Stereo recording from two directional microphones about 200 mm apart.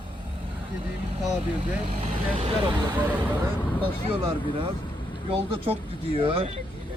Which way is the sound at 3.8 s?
25° right (ahead or behind).